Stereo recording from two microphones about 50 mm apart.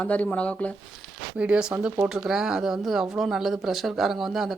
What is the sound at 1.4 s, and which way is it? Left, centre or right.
Speech, right.